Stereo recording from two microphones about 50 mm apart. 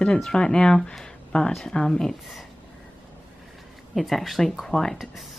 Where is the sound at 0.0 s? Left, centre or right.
Centre.